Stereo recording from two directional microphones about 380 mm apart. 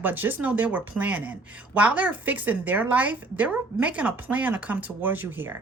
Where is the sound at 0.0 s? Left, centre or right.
Centre.